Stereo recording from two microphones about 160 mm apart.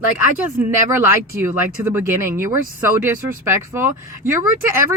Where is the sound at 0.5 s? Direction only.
15° right (ahead or behind).